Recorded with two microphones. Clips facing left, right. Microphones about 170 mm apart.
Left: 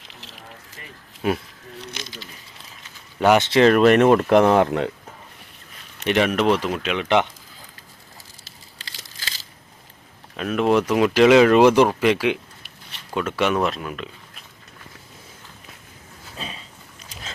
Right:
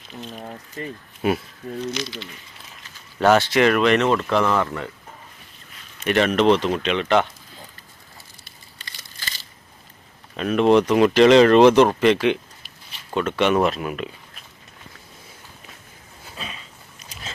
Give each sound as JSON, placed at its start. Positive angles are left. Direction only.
{"t": 1.2, "sound": "speech", "side_deg": -5}
{"t": 3.2, "sound": "speech", "side_deg": 15}
{"t": 6.1, "sound": "speech", "side_deg": 10}
{"t": 8.8, "sound": "a sound", "side_deg": 90}
{"t": 10.3, "sound": "speech", "side_deg": 0}